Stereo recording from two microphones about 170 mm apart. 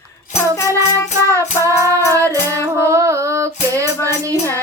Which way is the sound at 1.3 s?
15° right (ahead or behind).